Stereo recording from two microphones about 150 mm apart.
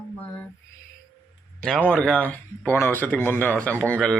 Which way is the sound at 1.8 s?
10° left (ahead or behind).